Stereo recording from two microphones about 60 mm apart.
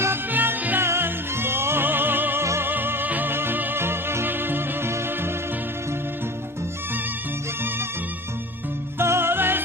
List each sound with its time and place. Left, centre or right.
0.3 s music: right
0.8 s music: right
2.4 s music: right
2.6 s music: right
9.0 s music: right